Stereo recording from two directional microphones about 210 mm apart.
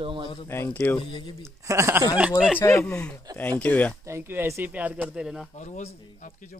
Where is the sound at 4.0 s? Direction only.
15° right (ahead or behind).